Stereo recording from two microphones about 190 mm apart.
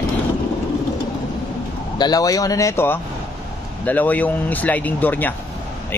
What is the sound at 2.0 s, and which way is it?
Speech, 20° left (ahead or behind).